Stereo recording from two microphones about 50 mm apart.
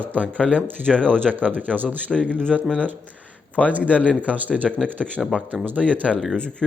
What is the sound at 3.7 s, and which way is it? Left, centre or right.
A man's voice, right.